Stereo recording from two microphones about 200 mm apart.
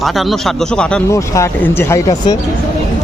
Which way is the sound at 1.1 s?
15° left (ahead or behind).